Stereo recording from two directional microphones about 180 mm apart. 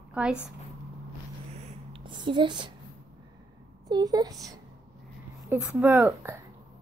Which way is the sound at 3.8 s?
20° right (ahead or behind).